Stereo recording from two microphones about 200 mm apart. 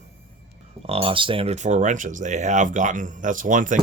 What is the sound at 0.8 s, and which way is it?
Speech, 30° right (ahead or behind).